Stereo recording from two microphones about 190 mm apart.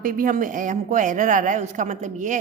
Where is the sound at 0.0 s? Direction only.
45° right (ahead or behind).